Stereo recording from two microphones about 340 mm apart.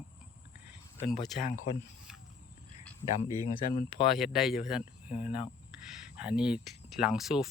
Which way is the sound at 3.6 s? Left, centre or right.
Left.